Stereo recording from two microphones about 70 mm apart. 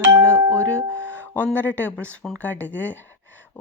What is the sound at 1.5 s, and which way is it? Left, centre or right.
Speech, left.